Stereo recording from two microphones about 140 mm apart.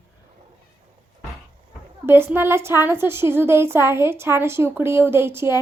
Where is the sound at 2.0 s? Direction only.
15° right (ahead or behind).